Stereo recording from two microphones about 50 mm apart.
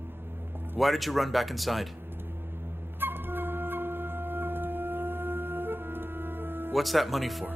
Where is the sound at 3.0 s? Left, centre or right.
Right.